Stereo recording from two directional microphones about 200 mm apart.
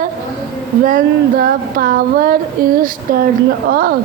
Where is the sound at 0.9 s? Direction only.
45° right (ahead or behind).